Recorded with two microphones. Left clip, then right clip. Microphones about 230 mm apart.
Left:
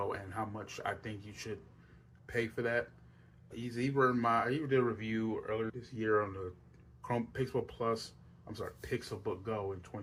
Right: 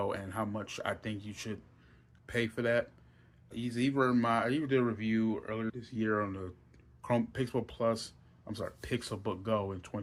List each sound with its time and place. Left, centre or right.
0.1 s speech: right